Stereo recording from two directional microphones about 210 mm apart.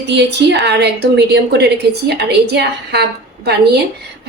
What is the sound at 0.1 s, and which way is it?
A woman's voice, 55° right (ahead or behind).